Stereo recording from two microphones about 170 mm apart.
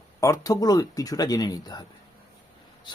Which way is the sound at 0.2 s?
20° left (ahead or behind).